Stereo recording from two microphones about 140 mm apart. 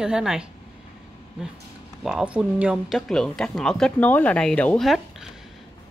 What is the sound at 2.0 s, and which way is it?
Speech, 5° right (ahead or behind).